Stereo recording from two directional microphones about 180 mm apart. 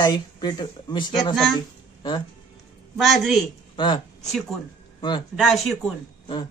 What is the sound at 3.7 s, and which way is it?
Speech, 25° left (ahead or behind).